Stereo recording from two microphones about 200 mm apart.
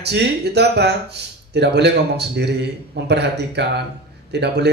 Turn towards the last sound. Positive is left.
turn(degrees=-55)  # may be behind; listen again after turning